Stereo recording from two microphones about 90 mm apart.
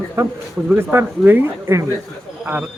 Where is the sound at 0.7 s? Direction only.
25° right (ahead or behind).